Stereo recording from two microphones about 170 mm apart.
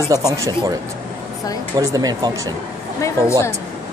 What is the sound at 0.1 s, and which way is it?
Speech, 20° right (ahead or behind).